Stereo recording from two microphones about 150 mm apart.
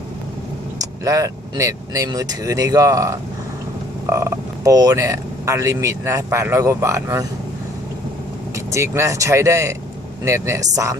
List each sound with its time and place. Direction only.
0.8 s speech: 20° right (ahead or behind)
8.5 s speech: 20° right (ahead or behind)